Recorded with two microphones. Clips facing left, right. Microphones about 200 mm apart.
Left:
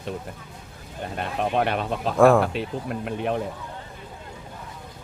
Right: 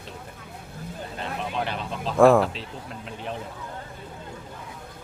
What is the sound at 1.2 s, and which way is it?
Speech, 60° left (ahead or behind).